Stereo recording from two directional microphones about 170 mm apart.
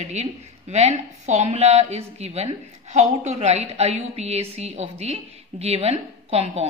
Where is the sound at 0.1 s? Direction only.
40° right (ahead or behind).